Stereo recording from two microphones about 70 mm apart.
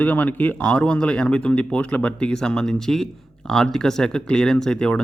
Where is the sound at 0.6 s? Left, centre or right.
Centre.